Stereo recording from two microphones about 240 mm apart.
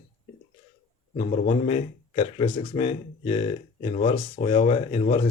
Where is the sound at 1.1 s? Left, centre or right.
Left.